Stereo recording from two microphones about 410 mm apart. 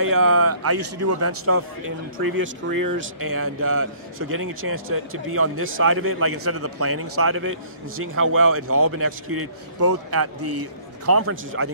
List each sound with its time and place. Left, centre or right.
0.0 s a man's voice: right